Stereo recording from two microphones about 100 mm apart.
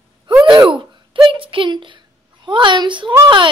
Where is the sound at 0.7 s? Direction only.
60° right (ahead or behind).